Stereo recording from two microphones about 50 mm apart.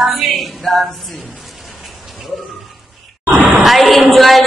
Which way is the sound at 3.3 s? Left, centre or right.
Right.